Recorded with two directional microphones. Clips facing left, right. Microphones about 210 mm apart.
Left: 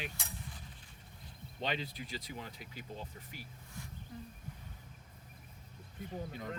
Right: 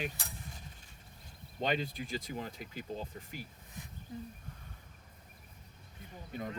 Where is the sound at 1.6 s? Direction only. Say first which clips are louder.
Right 5 dB; 45° right (ahead or behind).